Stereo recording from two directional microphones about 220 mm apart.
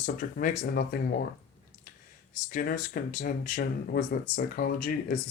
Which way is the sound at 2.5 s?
40° left (ahead or behind).